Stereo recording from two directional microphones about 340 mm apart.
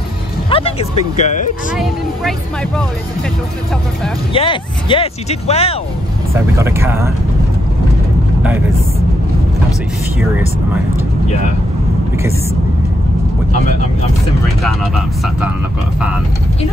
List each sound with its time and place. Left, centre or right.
0.5 s speech: centre
4.3 s speech: centre
6.3 s speech: centre
8.4 s speech: centre
14.6 s speech: centre